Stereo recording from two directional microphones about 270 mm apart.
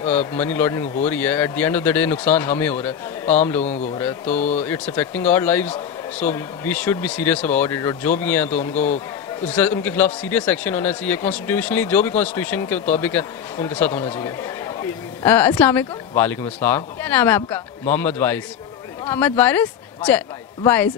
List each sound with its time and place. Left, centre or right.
0.0 s speech: centre
4.4 s speech: left
4.6 s speech: centre
8.5 s speech: left
9.5 s speech: centre